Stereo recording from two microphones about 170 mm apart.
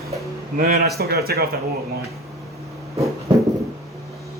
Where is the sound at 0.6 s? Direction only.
60° right (ahead or behind).